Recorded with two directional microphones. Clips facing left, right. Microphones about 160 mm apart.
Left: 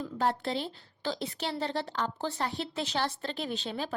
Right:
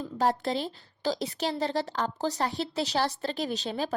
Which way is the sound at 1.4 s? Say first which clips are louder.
Right 4 dB; 40° right (ahead or behind).